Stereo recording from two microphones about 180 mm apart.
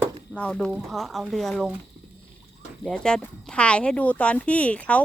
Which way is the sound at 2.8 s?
5° left (ahead or behind).